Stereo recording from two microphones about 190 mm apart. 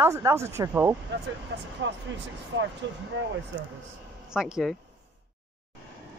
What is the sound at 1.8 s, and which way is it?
Speech, 75° right (ahead or behind).